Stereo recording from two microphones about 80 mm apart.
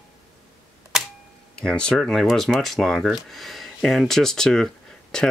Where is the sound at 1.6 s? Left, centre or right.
Centre.